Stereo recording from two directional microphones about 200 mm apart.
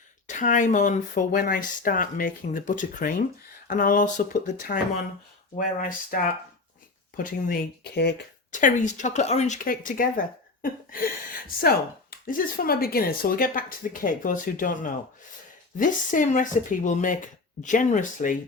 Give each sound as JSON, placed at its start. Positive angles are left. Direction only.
{"t": 0.3, "sound": "speech", "side_deg": 40}
{"t": 5.5, "sound": "speech", "side_deg": 45}
{"t": 8.5, "sound": "speech", "side_deg": 40}
{"t": 12.2, "sound": "speech", "side_deg": 45}